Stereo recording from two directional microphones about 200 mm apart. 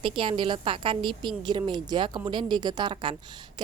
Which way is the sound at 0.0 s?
25° right (ahead or behind).